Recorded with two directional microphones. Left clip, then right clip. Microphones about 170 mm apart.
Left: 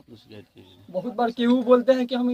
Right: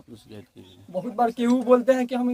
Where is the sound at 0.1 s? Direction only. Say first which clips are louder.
Right 1 dB; 80° right.